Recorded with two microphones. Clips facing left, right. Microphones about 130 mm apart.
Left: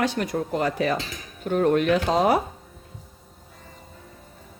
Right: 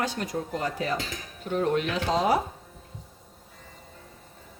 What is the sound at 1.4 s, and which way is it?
Speech, 55° left (ahead or behind).